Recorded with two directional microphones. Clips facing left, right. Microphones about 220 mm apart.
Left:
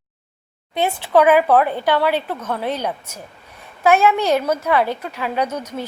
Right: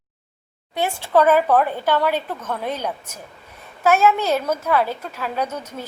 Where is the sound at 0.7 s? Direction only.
20° left (ahead or behind).